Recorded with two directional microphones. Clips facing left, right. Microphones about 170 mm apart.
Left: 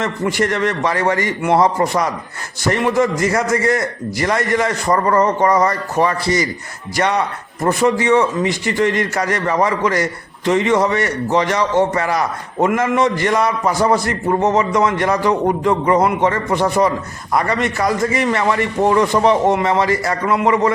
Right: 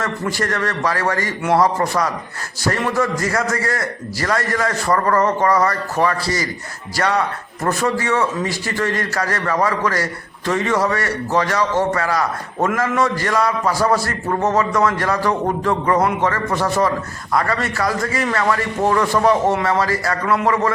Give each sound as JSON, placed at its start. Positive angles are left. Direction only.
{"t": 0.0, "sound": "a man's voice", "side_deg": 20}